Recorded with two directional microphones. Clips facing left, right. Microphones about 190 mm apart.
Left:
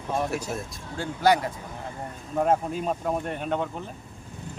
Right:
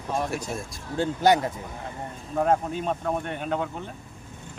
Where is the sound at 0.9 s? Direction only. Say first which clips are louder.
Right 2 dB; 20° right (ahead or behind).